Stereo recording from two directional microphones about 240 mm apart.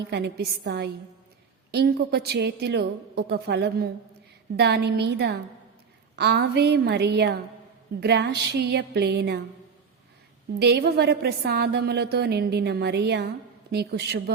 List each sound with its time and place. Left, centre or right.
0.0 s a woman's voice: right
10.6 s a woman's voice: right